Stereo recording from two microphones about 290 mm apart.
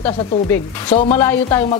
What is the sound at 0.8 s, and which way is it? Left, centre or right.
Speech, left.